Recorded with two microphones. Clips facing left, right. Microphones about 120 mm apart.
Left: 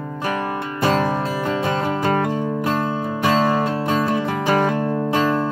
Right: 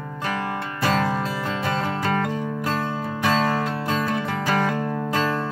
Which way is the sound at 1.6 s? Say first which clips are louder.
Left 2 dB; 15° left (ahead or behind).